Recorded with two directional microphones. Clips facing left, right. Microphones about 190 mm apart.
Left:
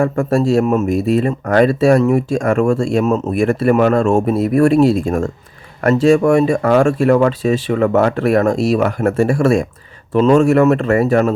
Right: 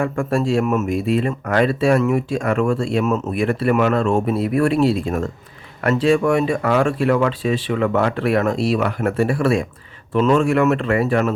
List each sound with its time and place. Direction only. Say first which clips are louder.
0.0 s speech: left 5 dB; 40° left (ahead or behind)